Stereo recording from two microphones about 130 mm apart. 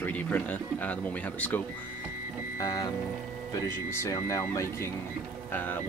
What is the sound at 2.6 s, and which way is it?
Speech, 25° left (ahead or behind).